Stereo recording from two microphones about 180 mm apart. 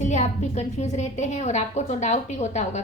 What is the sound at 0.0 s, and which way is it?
A woman's voice, 40° left (ahead or behind).